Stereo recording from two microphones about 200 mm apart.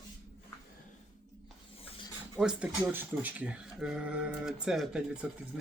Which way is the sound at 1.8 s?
30° left (ahead or behind).